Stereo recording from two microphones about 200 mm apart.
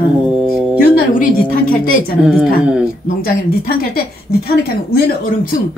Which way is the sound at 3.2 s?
50° left (ahead or behind).